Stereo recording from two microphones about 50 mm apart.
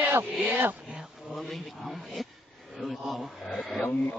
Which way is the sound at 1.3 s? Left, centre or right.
Centre.